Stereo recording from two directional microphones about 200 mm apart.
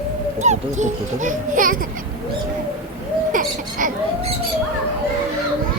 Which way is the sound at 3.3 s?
40° right (ahead or behind).